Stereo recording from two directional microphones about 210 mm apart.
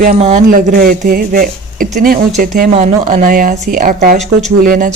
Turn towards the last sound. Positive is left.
turn(degrees=-40)  # may be behind; listen again after turning